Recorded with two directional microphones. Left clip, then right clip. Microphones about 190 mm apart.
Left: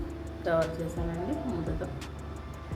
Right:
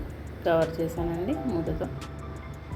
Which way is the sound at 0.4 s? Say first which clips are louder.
Right 4 dB; 20° right (ahead or behind).